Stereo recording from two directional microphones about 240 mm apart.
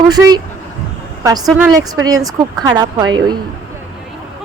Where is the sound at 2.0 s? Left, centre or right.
Centre.